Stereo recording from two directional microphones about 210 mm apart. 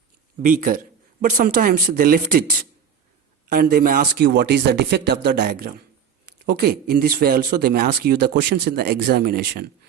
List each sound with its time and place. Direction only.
0.4 s speech: 40° right (ahead or behind)
3.5 s a man's voice: 45° right (ahead or behind)